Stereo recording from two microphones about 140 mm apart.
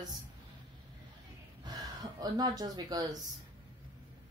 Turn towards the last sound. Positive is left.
turn(degrees=-30)  # may be behind; listen again after turning